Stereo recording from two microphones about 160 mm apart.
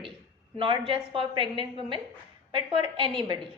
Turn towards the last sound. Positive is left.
turn(degrees=-30)  # may be behind; listen again after turning